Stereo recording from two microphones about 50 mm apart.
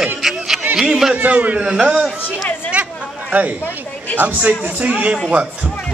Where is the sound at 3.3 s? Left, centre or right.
Right.